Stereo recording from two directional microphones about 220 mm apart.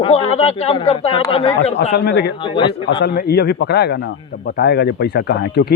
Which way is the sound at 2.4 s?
20° left (ahead or behind).